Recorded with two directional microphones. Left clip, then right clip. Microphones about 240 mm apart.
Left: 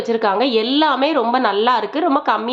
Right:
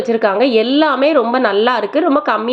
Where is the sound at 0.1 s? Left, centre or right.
Centre.